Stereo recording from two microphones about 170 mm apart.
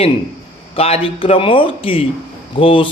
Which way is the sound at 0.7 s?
35° left (ahead or behind).